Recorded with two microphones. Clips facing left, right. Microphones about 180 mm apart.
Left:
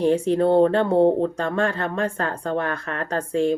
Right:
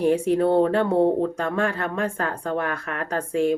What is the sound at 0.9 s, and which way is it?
Speech, 25° left (ahead or behind).